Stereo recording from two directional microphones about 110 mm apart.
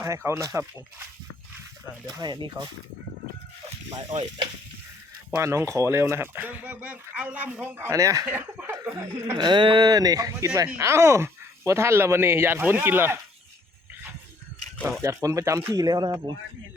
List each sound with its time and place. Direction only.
0.0 s speech: 25° right (ahead or behind)
2.0 s speech: 40° right (ahead or behind)
5.3 s speech: 25° right (ahead or behind)
8.3 s speech: 15° right (ahead or behind)
9.4 s speech: 45° right (ahead or behind); by 13.1 s 20° right (ahead or behind)
15.0 s speech: 30° right (ahead or behind)